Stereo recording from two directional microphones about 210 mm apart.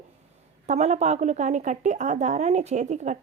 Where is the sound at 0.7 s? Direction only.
30° right (ahead or behind).